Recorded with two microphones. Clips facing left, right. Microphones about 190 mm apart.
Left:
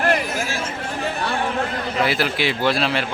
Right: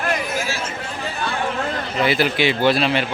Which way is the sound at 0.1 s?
50° left (ahead or behind).